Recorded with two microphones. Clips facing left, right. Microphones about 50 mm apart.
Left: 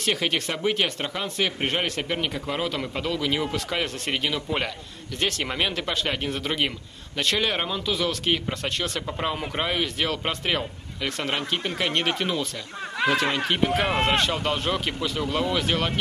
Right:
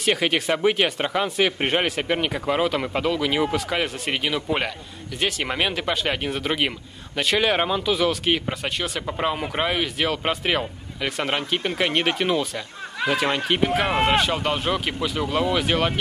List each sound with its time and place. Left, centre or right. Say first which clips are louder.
0.0 s speech: right 4 dB; centre
13.0 s speech: even; centre